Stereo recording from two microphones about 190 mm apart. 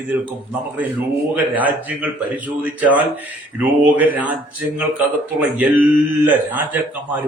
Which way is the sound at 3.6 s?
10° right (ahead or behind).